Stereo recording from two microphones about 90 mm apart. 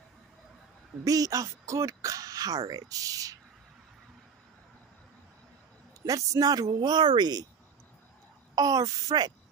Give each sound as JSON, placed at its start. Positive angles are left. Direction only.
{"t": 1.0, "sound": "speech", "side_deg": -40}
{"t": 6.0, "sound": "speech", "side_deg": -40}
{"t": 8.5, "sound": "speech", "side_deg": -45}